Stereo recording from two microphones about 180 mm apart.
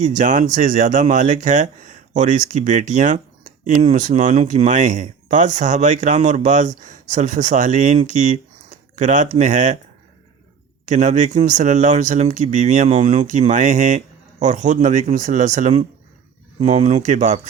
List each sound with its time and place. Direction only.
0.0 s speech: 45° right (ahead or behind)
10.8 s speech: 40° right (ahead or behind)